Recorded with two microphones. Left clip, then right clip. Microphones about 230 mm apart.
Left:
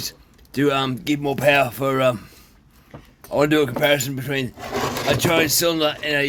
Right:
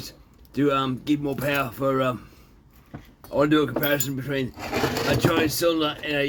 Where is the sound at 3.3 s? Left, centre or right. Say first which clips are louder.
Left 3 dB; left.